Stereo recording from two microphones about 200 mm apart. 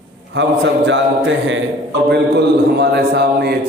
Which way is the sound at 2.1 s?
55° right (ahead or behind).